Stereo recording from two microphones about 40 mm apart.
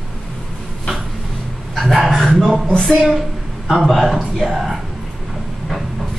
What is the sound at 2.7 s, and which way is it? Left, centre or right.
Speech, left.